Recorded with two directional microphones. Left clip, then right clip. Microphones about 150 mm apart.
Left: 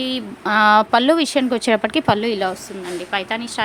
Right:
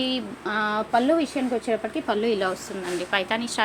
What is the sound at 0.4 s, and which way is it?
A woman's voice, 55° left (ahead or behind).